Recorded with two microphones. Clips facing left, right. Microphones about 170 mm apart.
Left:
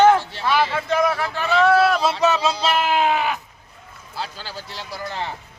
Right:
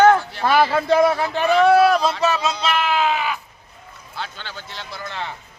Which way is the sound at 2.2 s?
25° left (ahead or behind).